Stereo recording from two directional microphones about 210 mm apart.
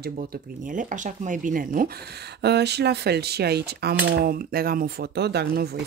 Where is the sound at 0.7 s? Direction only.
40° right (ahead or behind).